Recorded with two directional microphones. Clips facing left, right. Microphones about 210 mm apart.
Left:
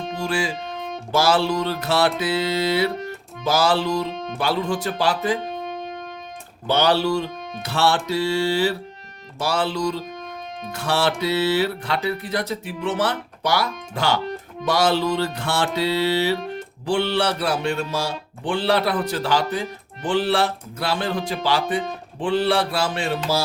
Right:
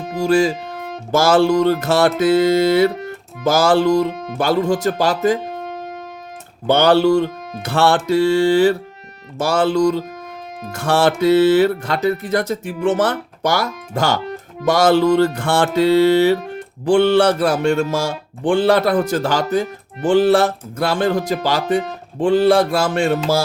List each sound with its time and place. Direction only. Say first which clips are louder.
0.2 s speech: right 11 dB; 40° right (ahead or behind)
0.5 s music: right 2 dB; 5° right (ahead or behind)
1.1 s speech: right 6 dB; 45° right (ahead or behind)
6.7 s speech: right 7 dB; 50° right (ahead or behind)